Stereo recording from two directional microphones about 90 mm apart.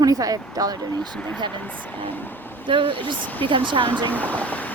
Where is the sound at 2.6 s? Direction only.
70° right (ahead or behind).